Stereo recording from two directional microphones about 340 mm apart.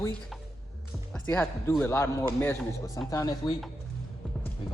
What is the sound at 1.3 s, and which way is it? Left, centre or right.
A man's voice, centre.